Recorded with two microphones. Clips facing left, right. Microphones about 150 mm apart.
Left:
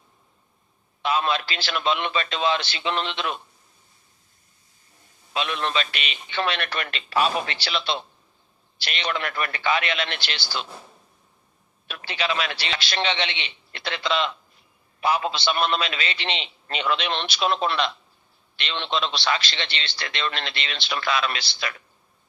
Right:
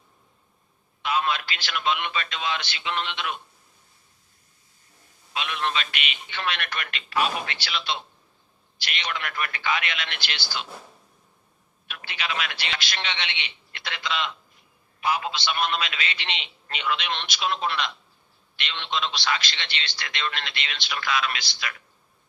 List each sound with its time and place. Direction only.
1.0 s a man's voice: 30° left (ahead or behind)
5.3 s a man's voice: 35° left (ahead or behind)
11.9 s a man's voice: 35° left (ahead or behind)